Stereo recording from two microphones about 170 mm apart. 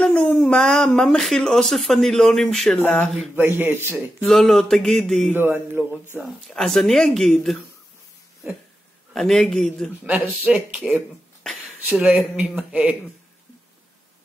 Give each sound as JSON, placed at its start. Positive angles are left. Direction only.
{"t": 0.0, "sound": "speech", "side_deg": 5}
{"t": 3.3, "sound": "speech", "side_deg": -10}
{"t": 4.3, "sound": "speech", "side_deg": 0}
{"t": 5.3, "sound": "speech", "side_deg": -10}
{"t": 6.2, "sound": "speech", "side_deg": 0}
{"t": 9.1, "sound": "speech", "side_deg": 5}
{"t": 10.0, "sound": "speech", "side_deg": -10}